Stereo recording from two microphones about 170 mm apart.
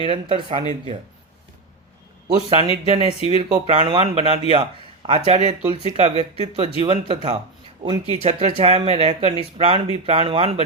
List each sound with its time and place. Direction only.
0.0 s speech: 35° right (ahead or behind)
2.2 s speech: 35° right (ahead or behind)
7.8 s speech: 25° right (ahead or behind)